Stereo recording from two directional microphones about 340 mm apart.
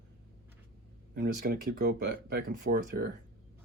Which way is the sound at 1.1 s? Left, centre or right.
Right.